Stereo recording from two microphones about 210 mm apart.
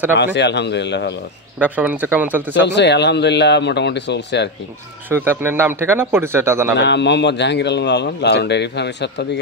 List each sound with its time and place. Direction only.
0.2 s speech: 55° left (ahead or behind)
1.6 s speech: 10° right (ahead or behind)
2.5 s speech: 55° left (ahead or behind)
5.1 s speech: 10° right (ahead or behind)
6.8 s speech: 55° left (ahead or behind)